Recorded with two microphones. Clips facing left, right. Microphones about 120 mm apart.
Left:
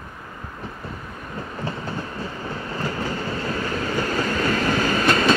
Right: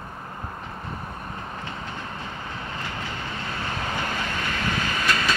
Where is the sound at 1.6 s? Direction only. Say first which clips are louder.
Left 5 dB; 35° left (ahead or behind).